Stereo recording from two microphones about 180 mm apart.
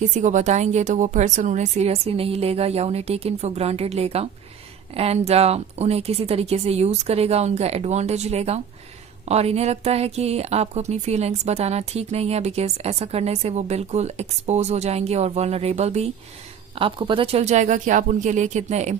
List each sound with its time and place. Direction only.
0.0 s speech: 40° right (ahead or behind)